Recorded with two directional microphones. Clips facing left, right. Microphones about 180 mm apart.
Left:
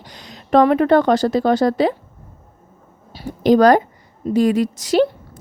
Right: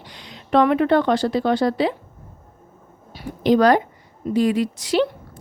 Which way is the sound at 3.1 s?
35° left (ahead or behind).